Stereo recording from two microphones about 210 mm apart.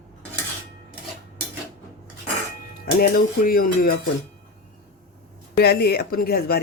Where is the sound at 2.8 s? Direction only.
45° left (ahead or behind).